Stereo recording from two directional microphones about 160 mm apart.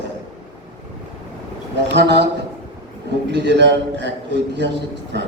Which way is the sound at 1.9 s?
90° right.